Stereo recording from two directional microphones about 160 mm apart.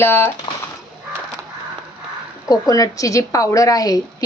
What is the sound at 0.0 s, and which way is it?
Speech, 15° left (ahead or behind).